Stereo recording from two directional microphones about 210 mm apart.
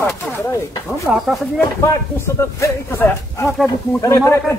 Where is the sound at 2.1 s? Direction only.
10° left (ahead or behind).